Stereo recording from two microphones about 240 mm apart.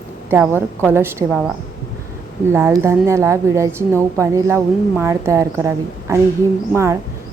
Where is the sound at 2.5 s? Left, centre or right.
Centre.